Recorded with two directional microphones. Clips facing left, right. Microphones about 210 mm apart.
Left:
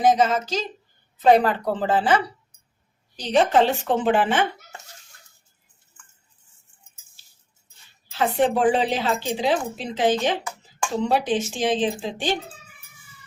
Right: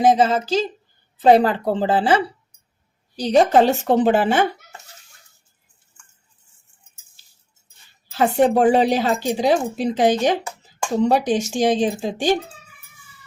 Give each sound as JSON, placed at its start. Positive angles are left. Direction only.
{"t": 0.0, "sound": "a woman's voice", "side_deg": -30}
{"t": 8.1, "sound": "speech", "side_deg": -45}